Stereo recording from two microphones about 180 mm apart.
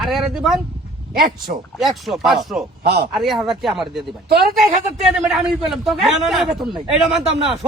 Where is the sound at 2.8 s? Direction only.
60° right (ahead or behind).